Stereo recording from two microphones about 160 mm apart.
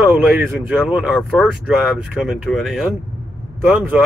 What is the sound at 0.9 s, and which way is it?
Speech, centre (ahead or behind).